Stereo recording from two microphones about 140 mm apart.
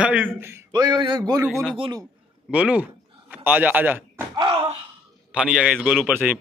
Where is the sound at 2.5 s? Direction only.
10° right (ahead or behind).